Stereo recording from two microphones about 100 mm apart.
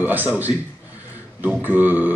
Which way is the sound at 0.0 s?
20° right (ahead or behind).